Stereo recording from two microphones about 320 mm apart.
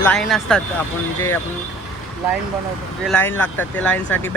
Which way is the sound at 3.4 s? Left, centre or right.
Centre.